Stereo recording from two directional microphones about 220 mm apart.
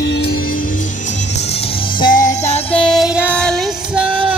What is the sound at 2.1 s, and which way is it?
Music, 35° left (ahead or behind).